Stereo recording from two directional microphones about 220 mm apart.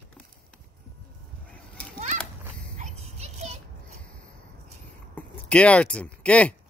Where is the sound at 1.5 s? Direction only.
5° left (ahead or behind).